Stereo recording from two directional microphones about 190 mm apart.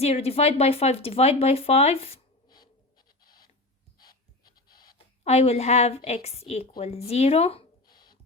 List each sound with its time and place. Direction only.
0.0 s speech: 35° left (ahead or behind)
4.0 s pant: 20° left (ahead or behind)
5.2 s speech: 35° left (ahead or behind)